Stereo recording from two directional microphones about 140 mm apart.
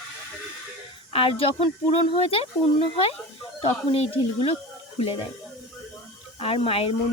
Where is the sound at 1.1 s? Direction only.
40° left (ahead or behind).